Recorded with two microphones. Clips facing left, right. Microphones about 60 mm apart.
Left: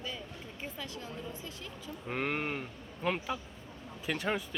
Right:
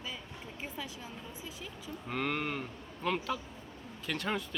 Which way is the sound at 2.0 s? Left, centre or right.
Centre.